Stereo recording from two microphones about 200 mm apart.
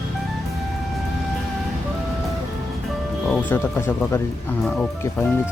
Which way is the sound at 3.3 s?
10° left (ahead or behind).